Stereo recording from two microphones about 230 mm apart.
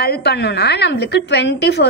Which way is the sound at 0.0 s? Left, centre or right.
Left.